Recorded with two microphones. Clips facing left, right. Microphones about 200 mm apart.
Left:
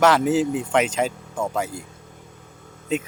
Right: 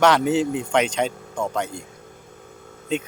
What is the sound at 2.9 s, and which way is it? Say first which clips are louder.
Speech: left 1 dB; 5° left (ahead or behind).